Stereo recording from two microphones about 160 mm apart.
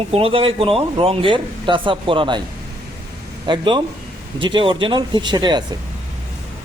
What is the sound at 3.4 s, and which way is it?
Speech, 30° right (ahead or behind).